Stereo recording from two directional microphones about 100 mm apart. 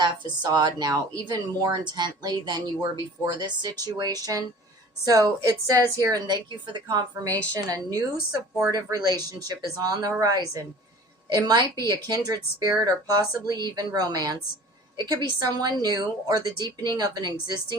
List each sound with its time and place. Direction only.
0.0 s a woman's voice: 45° right (ahead or behind)